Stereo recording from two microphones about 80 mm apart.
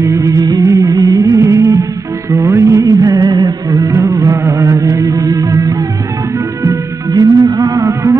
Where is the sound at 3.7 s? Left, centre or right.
Right.